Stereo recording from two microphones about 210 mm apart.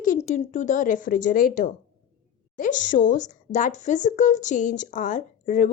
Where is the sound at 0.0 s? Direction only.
35° left (ahead or behind).